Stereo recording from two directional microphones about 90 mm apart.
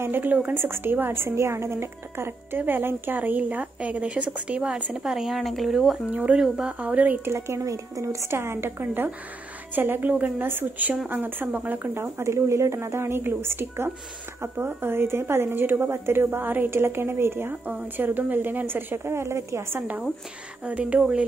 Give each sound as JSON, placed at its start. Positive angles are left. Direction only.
{"t": 0.0, "sound": "a woman's voice", "side_deg": -20}
{"t": 7.2, "sound": "a woman's voice", "side_deg": -30}
{"t": 20.6, "sound": "speech", "side_deg": -15}